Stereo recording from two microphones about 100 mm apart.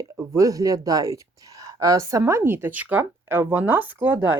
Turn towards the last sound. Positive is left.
turn(degrees=-20)  # may be behind; listen again after turning